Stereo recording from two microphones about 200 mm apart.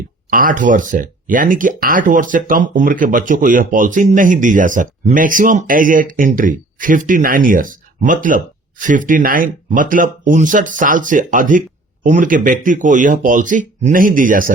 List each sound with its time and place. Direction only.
0.3 s speech: 45° right (ahead or behind)